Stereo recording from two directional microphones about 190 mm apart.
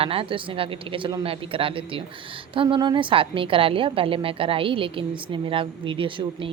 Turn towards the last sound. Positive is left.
turn(degrees=-25)  # may be behind; listen again after turning